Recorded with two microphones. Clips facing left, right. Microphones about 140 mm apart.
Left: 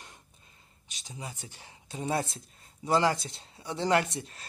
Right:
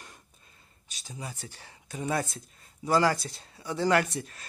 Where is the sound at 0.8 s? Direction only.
20° left (ahead or behind).